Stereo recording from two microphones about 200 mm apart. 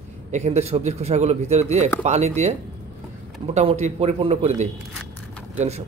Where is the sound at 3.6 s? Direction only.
35° right (ahead or behind).